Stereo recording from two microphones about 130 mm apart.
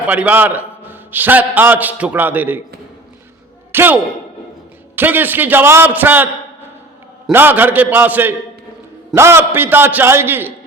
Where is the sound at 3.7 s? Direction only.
15° right (ahead or behind).